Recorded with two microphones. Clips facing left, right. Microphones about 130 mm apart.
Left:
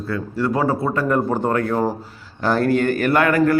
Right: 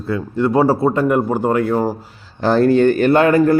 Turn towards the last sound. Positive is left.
turn(degrees=-25)  # may be behind; listen again after turning